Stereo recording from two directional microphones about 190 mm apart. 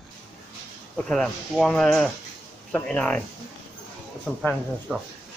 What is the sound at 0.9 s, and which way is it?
Speech, 5° left (ahead or behind).